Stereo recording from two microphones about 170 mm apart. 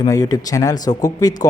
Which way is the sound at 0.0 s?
20° left (ahead or behind).